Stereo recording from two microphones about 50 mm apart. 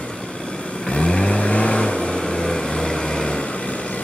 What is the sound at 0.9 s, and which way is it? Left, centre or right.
Vehicle, centre.